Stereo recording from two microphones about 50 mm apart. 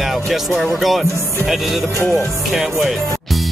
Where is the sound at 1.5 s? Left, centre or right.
Centre.